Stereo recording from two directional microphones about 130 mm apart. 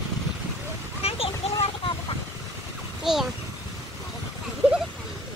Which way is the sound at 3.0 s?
Centre (ahead or behind).